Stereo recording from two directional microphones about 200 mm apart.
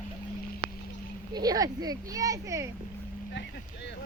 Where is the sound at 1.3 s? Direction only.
20° right (ahead or behind).